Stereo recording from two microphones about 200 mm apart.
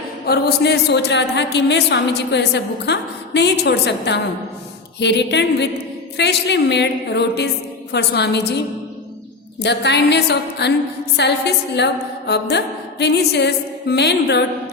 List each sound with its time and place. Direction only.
0.3 s a woman's voice: 55° left (ahead or behind)
9.6 s a woman's voice: 60° left (ahead or behind)